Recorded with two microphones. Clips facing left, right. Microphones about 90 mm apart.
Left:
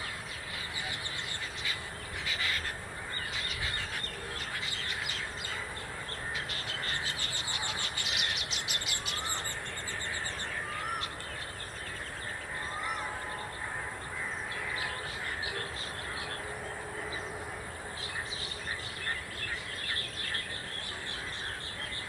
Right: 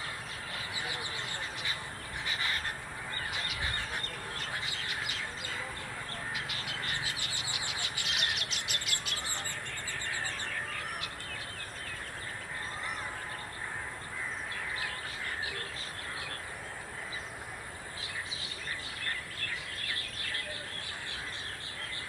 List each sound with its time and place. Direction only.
7.0 s a sound: 15° right (ahead or behind)
8.0 s bird: centre (ahead or behind)
19.9 s bird: 40° left (ahead or behind)